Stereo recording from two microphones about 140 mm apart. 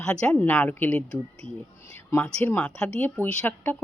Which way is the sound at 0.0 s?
5° left (ahead or behind).